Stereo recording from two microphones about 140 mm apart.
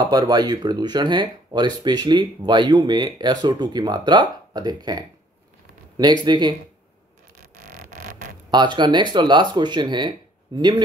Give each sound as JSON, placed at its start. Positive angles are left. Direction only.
{"t": 0.0, "sound": "speech", "side_deg": -30}
{"t": 6.2, "sound": "speech", "side_deg": -30}
{"t": 7.6, "sound": "music", "side_deg": -80}
{"t": 8.5, "sound": "speech", "side_deg": -35}